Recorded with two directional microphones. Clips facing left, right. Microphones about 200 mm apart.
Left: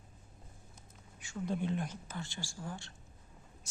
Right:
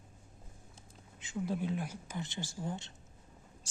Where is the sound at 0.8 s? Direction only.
20° right (ahead or behind).